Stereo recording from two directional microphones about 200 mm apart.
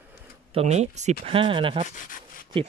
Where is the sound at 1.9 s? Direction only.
40° left (ahead or behind).